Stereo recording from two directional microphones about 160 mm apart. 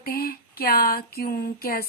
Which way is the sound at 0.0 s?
70° left (ahead or behind).